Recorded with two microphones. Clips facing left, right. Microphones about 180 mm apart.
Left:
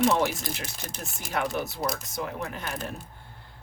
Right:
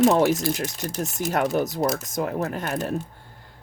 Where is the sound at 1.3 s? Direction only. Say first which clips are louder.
Right 6 dB; 45° right (ahead or behind).